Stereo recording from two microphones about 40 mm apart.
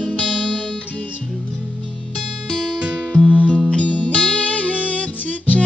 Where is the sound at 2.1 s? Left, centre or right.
Centre.